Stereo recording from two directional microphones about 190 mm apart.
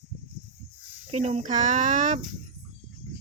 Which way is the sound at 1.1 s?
35° right (ahead or behind).